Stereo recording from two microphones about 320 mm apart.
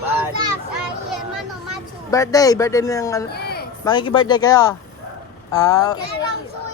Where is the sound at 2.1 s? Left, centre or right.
Centre.